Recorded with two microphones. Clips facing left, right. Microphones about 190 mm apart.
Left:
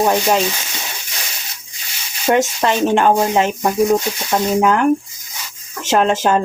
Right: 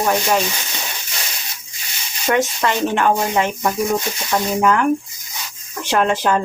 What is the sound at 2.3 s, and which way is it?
Speech, 25° left (ahead or behind).